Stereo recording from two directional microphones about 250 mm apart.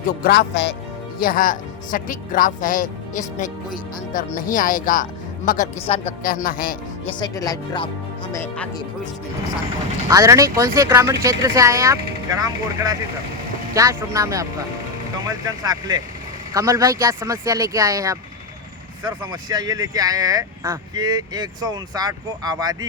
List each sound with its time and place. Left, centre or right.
0.0 s a man's voice: left
7.2 s speech: centre
10.1 s speech: centre